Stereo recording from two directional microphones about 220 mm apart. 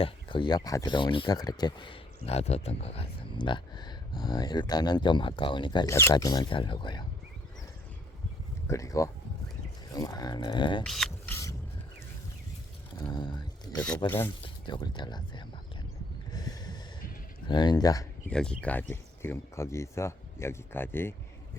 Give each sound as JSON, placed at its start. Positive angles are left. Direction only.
{"t": 0.0, "sound": "speech", "side_deg": 20}
{"t": 8.6, "sound": "speech", "side_deg": 15}
{"t": 10.8, "sound": "a sound", "side_deg": 0}
{"t": 13.0, "sound": "speech", "side_deg": 20}
{"t": 13.7, "sound": "speech", "side_deg": 5}
{"t": 14.4, "sound": "speech", "side_deg": 20}
{"t": 16.3, "sound": "snort", "side_deg": 20}
{"t": 17.5, "sound": "speech", "side_deg": 20}
{"t": 18.3, "sound": "speech", "side_deg": 5}